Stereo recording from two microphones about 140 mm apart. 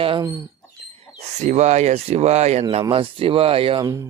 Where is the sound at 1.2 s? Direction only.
55° right (ahead or behind).